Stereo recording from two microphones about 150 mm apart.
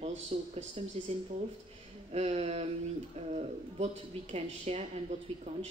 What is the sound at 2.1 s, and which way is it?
Speech, 45° right (ahead or behind).